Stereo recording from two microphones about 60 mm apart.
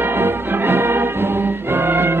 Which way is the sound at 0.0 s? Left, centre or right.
Right.